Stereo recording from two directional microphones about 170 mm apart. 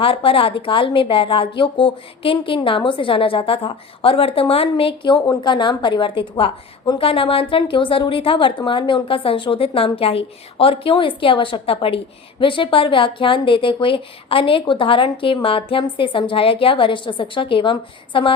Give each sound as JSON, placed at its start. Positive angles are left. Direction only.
{"t": 0.0, "sound": "a woman's voice", "side_deg": 30}